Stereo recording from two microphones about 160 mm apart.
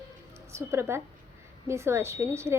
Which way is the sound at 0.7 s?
15° right (ahead or behind).